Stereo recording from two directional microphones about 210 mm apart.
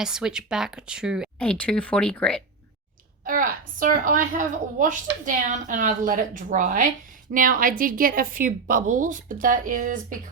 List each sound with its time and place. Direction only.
0.0 s speech: 5° right (ahead or behind)
3.2 s a woman's voice: 40° right (ahead or behind)